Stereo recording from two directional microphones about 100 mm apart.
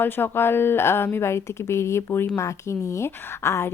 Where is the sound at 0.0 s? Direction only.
20° left (ahead or behind).